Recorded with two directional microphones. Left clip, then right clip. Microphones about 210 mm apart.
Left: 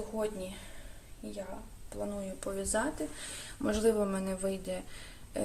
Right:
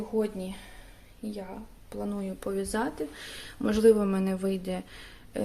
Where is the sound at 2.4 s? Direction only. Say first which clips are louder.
Right 3 dB; 35° right (ahead or behind).